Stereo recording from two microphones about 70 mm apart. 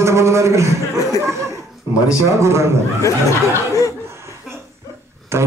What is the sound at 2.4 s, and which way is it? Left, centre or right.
Speech, right.